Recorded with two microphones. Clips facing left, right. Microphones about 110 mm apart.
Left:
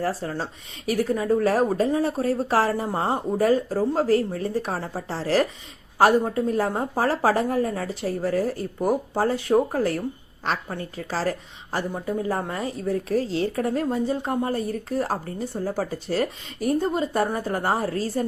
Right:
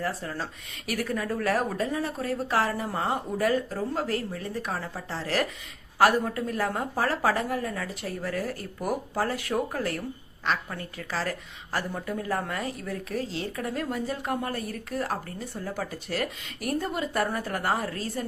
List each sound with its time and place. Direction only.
0.0 s a woman's voice: 35° left (ahead or behind)